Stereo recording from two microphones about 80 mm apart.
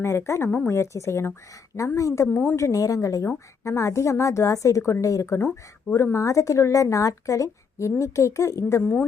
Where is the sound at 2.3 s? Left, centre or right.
Left.